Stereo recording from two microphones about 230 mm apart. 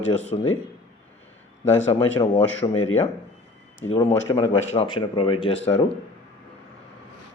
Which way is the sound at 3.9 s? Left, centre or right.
Left.